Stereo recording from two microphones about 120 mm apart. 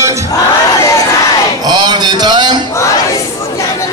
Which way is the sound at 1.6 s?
35° right (ahead or behind).